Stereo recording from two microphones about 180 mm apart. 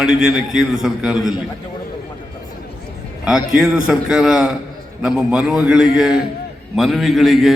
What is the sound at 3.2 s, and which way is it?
Mantra, 5° right (ahead or behind).